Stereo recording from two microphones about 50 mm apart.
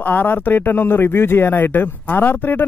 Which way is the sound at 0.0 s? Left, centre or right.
Left.